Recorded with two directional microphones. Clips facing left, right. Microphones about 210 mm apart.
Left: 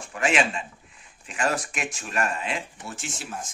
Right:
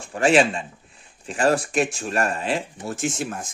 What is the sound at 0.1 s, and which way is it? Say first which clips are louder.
Speech: right 7 dB; 35° right (ahead or behind).